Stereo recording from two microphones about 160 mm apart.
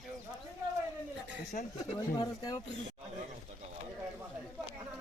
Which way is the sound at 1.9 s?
25° left (ahead or behind).